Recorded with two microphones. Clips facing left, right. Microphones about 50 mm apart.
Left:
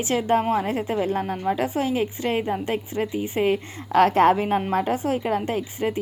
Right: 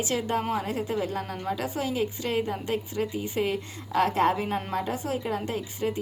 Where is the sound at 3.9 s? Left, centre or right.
Left.